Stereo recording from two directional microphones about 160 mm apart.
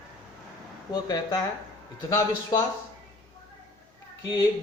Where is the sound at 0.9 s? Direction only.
25° left (ahead or behind).